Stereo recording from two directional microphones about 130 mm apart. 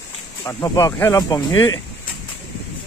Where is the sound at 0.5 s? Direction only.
25° left (ahead or behind).